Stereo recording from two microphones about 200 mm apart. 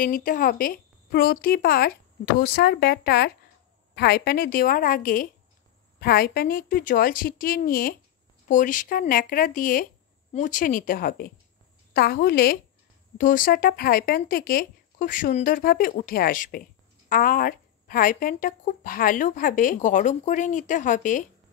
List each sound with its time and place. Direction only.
0.0 s speech: 45° left (ahead or behind)